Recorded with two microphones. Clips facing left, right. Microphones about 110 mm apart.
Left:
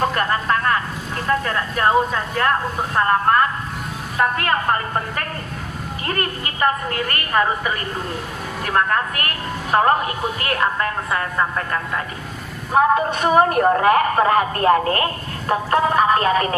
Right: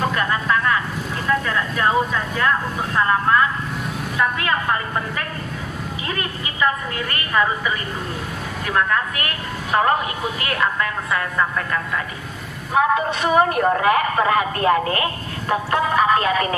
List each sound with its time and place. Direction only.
0.0 s a man's voice: 45° left (ahead or behind)